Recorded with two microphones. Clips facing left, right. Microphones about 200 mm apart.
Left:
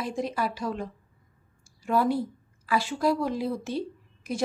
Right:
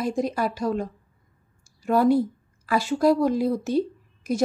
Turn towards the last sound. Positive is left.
turn(degrees=-40)  # may be behind; listen again after turning